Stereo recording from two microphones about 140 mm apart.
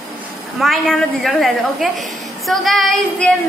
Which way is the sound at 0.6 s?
Centre (ahead or behind).